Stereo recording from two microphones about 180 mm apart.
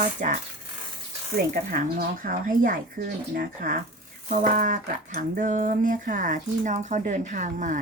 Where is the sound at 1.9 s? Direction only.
50° right (ahead or behind).